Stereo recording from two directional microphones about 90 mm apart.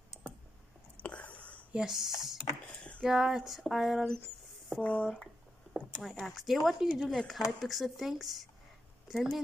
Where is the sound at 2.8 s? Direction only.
10° left (ahead or behind).